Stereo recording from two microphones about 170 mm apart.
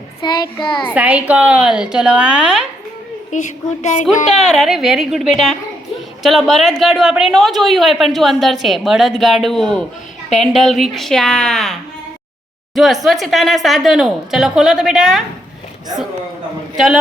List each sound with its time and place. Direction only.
0.2 s a child's voice: 25° left (ahead or behind)
0.9 s speech: 10° right (ahead or behind)
3.3 s a woman's voice: 45° left (ahead or behind)
4.3 s speech: centre (ahead or behind)
16.7 s a man's voice: centre (ahead or behind)